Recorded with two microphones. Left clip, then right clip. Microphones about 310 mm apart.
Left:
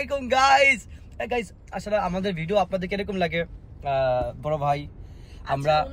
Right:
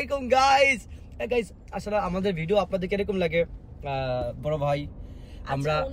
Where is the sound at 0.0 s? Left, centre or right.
Centre.